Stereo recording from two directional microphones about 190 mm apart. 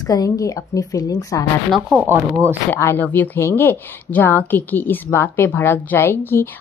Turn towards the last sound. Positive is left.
turn(degrees=10)  # may be behind; listen again after turning